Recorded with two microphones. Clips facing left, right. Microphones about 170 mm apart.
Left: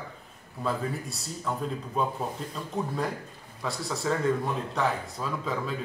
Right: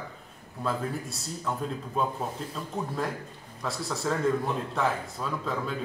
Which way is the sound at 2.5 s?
Centre (ahead or behind).